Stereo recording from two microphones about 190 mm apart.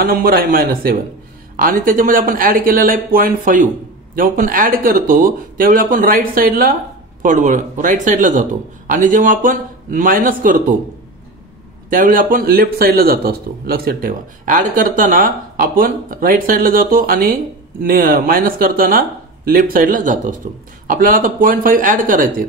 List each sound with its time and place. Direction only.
0.0 s speech: 50° right (ahead or behind)
11.9 s speech: 45° right (ahead or behind)